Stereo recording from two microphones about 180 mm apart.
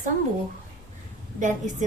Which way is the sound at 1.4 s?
45° right (ahead or behind).